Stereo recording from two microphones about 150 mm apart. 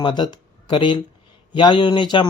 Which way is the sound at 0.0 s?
30° left (ahead or behind).